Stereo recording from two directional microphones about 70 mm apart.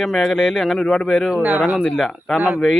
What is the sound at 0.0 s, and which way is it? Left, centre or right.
Speech, centre.